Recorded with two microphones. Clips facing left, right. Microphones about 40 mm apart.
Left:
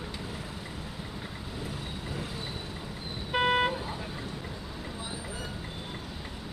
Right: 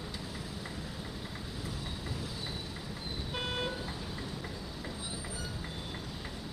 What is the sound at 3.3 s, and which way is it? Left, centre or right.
Vehicle, left.